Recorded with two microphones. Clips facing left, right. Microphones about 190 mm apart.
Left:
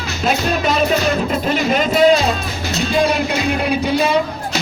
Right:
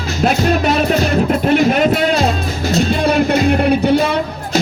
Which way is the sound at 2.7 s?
55° right (ahead or behind).